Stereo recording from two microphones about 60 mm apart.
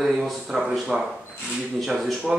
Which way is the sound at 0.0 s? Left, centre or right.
Centre.